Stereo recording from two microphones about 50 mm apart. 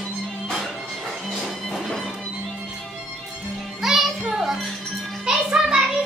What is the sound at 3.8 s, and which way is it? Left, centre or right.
Music, centre.